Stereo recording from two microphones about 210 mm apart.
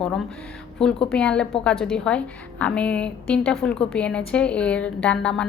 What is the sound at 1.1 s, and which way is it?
A woman's voice, 5° left (ahead or behind).